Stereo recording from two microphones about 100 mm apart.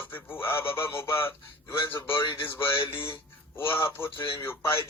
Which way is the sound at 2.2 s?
50° left (ahead or behind).